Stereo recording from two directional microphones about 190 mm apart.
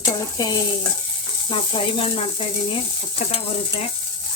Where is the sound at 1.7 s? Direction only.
30° left (ahead or behind).